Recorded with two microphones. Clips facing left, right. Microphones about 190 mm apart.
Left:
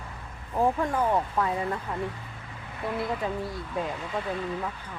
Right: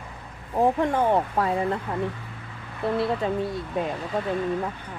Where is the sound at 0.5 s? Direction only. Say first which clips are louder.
Right 4 dB; 25° right (ahead or behind).